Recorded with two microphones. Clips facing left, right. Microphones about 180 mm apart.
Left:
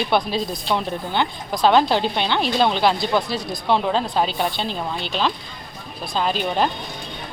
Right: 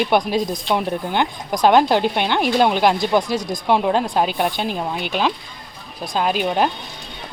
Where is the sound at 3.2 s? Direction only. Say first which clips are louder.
Right 4 dB; 45° right (ahead or behind).